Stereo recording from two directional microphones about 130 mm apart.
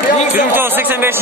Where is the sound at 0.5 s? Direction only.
15° right (ahead or behind).